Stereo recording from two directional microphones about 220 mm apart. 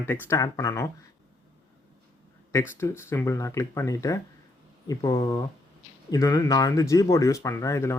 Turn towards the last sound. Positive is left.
turn(degrees=10)  # may be behind; listen again after turning